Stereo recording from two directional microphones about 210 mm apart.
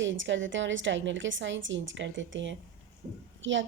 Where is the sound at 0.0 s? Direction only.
60° right (ahead or behind).